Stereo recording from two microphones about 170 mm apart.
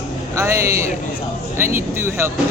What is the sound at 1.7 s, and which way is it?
Speech, 15° right (ahead or behind).